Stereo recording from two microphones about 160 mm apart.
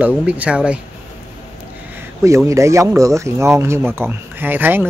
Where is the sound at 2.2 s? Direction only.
20° right (ahead or behind).